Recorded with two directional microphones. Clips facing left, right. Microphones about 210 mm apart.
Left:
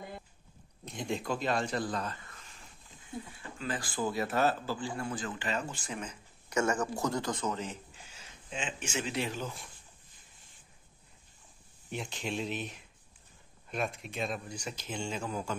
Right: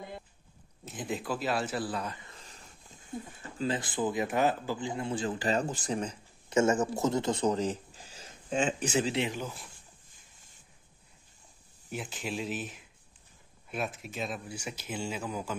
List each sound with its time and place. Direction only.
0.8 s speech: 5° right (ahead or behind)
3.6 s speech: 25° right (ahead or behind)
9.2 s speech: 15° right (ahead or behind)
11.9 s speech: 5° right (ahead or behind)